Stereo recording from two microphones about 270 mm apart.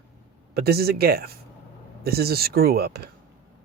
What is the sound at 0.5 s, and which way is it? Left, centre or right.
Speech, right.